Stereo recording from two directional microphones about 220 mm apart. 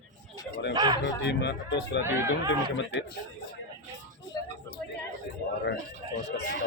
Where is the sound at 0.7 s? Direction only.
20° right (ahead or behind).